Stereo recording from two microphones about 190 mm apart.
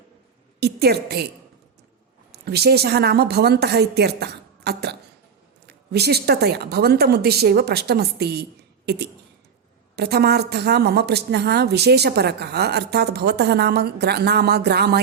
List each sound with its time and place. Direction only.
0.6 s a woman's voice: 55° right (ahead or behind)
2.3 s a woman's voice: 55° right (ahead or behind)